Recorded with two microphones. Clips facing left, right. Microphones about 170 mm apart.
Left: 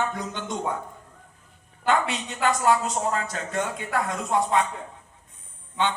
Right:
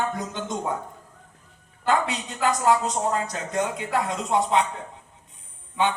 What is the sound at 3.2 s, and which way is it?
Speech, 20° right (ahead or behind).